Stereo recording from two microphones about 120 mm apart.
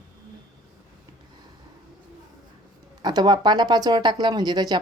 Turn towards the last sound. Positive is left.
turn(degrees=-35)  # may be behind; listen again after turning